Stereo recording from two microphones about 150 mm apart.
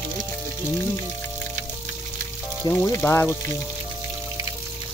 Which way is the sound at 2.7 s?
15° left (ahead or behind).